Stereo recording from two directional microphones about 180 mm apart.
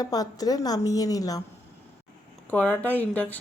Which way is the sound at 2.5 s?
10° left (ahead or behind).